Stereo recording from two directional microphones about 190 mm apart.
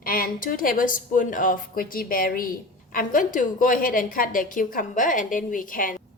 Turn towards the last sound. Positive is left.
turn(degrees=45)  # may be behind; listen again after turning